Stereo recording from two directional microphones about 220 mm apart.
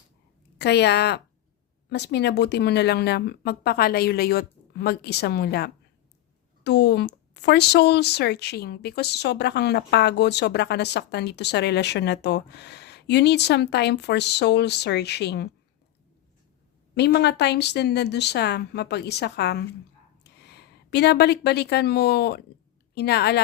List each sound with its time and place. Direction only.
0.6 s speech: 50° left (ahead or behind)
16.9 s a woman's voice: 50° left (ahead or behind)